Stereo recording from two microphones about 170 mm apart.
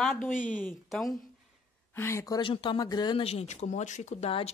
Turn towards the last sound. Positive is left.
turn(degrees=35)  # may be behind; listen again after turning